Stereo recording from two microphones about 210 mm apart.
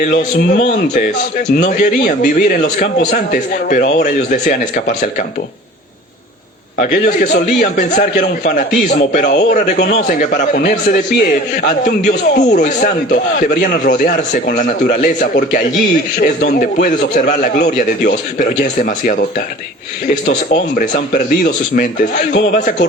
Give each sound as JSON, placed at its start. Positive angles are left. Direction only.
{"t": 0.0, "sound": "a man's voice", "side_deg": 40}
{"t": 6.7, "sound": "a man's voice", "side_deg": 40}
{"t": 20.2, "sound": "a man's voice", "side_deg": 40}